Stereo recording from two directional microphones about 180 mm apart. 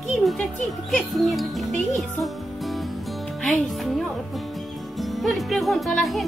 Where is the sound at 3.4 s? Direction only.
Centre (ahead or behind).